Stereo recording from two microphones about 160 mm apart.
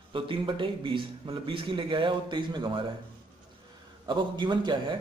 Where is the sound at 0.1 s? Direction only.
30° right (ahead or behind).